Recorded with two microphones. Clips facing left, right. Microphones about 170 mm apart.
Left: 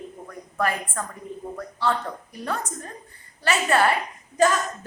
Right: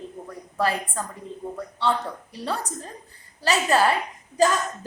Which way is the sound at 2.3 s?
30° right (ahead or behind).